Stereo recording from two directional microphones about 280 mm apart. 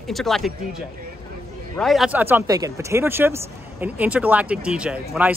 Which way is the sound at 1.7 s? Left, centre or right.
Centre.